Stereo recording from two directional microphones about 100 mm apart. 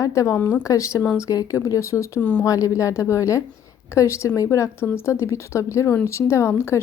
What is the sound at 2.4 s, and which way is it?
A woman's voice, 35° left (ahead or behind).